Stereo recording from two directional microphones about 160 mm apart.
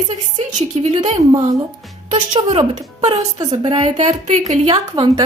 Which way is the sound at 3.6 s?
45° right (ahead or behind).